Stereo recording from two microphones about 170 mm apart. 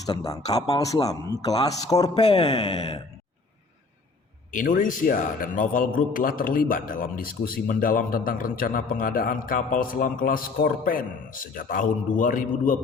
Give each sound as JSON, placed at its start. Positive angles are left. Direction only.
{"t": 0.3, "sound": "a man's voice", "side_deg": 20}
{"t": 2.1, "sound": "speech", "side_deg": 35}
{"t": 4.5, "sound": "a man's voice", "side_deg": 50}